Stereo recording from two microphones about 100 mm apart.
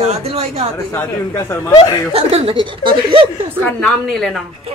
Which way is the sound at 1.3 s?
30° left (ahead or behind).